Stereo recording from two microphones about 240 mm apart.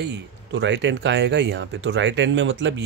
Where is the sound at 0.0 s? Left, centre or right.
Right.